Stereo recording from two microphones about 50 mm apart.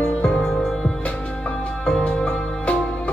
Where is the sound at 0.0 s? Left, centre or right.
Left.